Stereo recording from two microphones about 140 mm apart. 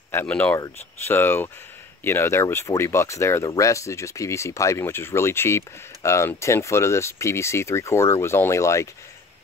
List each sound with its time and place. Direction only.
0.1 s speech: 15° left (ahead or behind)